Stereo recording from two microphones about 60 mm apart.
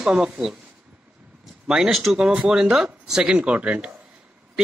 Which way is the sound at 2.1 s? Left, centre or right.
Centre.